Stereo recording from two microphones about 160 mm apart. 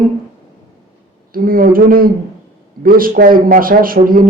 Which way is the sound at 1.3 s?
60° right (ahead or behind).